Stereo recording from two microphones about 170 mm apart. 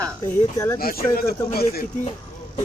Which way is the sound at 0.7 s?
60° left (ahead or behind).